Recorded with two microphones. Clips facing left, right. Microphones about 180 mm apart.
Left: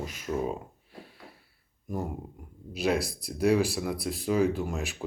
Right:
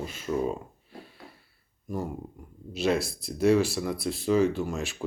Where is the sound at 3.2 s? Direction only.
10° left (ahead or behind).